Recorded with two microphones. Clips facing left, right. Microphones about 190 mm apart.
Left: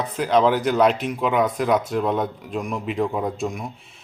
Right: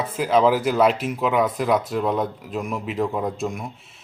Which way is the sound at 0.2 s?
5° right (ahead or behind).